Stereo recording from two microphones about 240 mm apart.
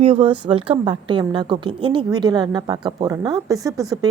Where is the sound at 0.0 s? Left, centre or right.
Right.